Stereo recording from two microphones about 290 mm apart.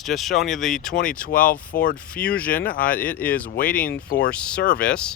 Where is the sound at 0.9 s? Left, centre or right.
Left.